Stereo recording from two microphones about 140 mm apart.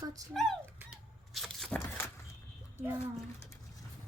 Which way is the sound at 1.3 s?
5° left (ahead or behind).